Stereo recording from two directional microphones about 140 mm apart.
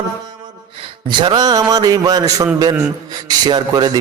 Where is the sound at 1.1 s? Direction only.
35° right (ahead or behind).